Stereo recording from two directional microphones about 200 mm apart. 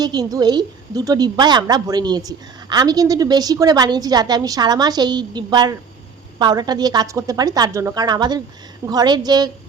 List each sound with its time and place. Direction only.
0.0 s a woman's voice: 20° right (ahead or behind)